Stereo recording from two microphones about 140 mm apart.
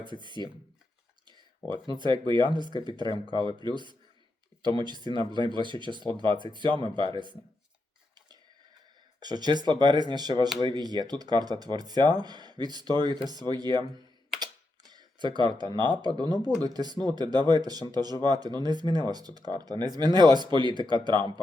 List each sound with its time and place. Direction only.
0.0 s speech: 35° right (ahead or behind)
1.7 s speech: 35° right (ahead or behind)
9.2 s speech: 30° right (ahead or behind)